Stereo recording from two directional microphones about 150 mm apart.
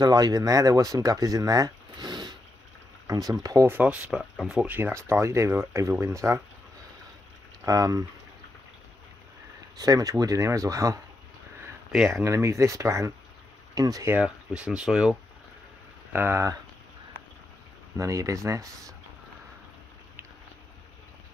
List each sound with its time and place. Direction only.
0.0 s speech: 25° right (ahead or behind)
7.6 s speech: 25° right (ahead or behind)
9.8 s speech: 25° right (ahead or behind)
12.1 s speech: 20° right (ahead or behind)
14.1 s speech: 5° right (ahead or behind)
17.9 s speech: 20° right (ahead or behind)